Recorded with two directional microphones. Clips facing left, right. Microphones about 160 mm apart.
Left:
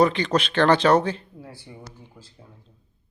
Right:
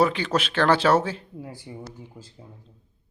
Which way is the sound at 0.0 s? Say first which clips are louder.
Left 2 dB; 5° right (ahead or behind).